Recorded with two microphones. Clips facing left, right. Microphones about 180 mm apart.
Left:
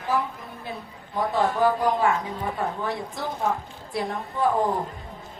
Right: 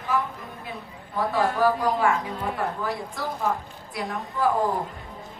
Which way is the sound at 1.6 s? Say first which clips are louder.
Left 1 dB; 20° left (ahead or behind).